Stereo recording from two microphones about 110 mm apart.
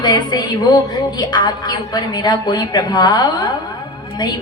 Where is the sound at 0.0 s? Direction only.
40° left (ahead or behind).